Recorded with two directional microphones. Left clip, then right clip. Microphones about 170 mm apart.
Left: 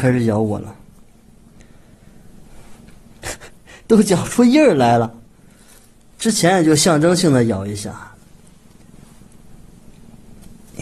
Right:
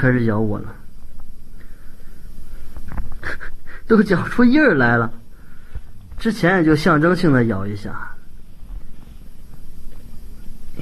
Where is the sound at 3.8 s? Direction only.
30° left (ahead or behind).